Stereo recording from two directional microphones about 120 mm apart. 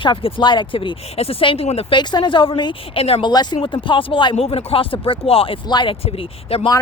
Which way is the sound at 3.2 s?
35° left (ahead or behind).